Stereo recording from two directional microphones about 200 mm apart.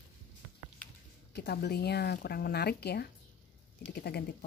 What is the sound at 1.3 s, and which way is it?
Speech, 55° left (ahead or behind).